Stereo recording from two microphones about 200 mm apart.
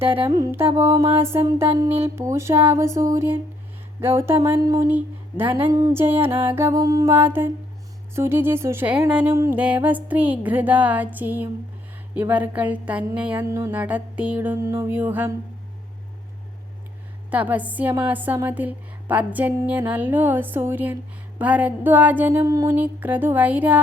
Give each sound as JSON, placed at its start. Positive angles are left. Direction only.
{"t": 0.2, "sound": "a woman's voice", "side_deg": -20}
{"t": 17.3, "sound": "a woman's voice", "side_deg": -10}